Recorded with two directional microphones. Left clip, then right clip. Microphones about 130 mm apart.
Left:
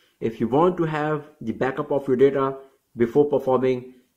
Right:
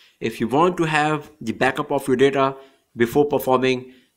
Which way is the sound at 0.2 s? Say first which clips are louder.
Right 1 dB; 10° right (ahead or behind).